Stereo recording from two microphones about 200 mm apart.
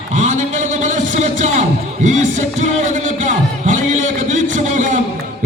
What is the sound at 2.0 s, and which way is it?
Music, 35° right (ahead or behind).